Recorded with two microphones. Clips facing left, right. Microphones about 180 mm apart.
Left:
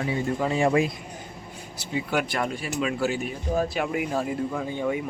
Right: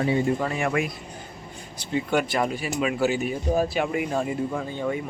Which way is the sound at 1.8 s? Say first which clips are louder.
Right 3 dB; 5° left (ahead or behind).